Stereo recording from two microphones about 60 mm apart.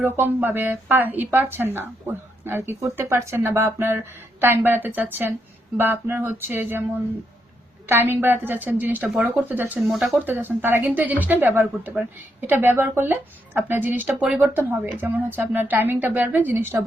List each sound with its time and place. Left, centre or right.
0.0 s speech: right
9.8 s speech: centre
10.2 s speech: right